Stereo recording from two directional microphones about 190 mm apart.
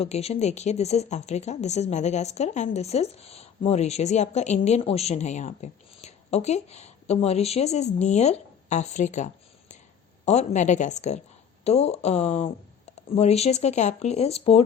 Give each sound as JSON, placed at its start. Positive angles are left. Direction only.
{"t": 0.0, "sound": "speech", "side_deg": 35}